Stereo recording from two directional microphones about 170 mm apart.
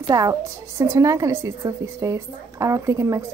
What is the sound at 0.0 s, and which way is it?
A woman's voice, 20° right (ahead or behind).